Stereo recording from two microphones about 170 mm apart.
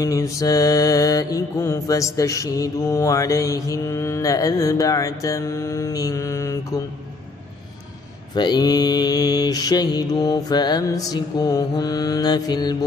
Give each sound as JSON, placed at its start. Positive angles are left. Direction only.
{"t": 0.0, "sound": "mantra", "side_deg": 20}
{"t": 8.4, "sound": "mantra", "side_deg": 25}